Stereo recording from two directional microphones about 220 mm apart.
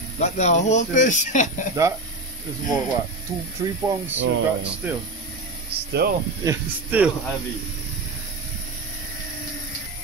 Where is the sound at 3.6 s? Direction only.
15° right (ahead or behind).